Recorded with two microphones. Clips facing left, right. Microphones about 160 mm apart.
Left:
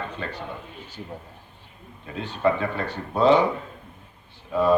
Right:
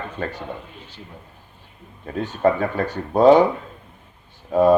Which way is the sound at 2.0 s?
45° right (ahead or behind).